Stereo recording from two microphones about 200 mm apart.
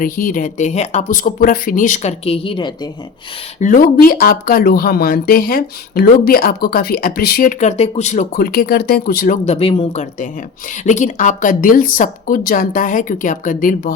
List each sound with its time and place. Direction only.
0.0 s speech: 45° left (ahead or behind); by 2.9 s 20° left (ahead or behind)
3.6 s speech: 40° left (ahead or behind)
7.6 s speech: 35° left (ahead or behind)